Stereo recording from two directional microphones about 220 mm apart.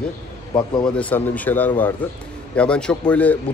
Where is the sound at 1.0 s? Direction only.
5° left (ahead or behind).